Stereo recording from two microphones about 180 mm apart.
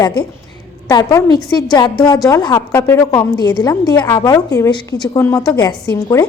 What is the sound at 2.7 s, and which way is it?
A woman's voice, 15° left (ahead or behind).